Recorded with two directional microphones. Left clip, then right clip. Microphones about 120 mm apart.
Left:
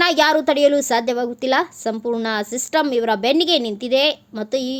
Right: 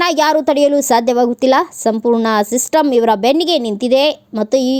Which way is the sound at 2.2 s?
55° right (ahead or behind).